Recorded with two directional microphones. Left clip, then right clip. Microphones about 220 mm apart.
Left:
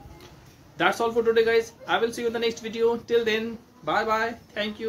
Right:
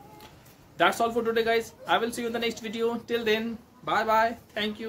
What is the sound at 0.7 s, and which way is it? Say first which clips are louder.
Speech: left 1 dB; 15° right (ahead or behind).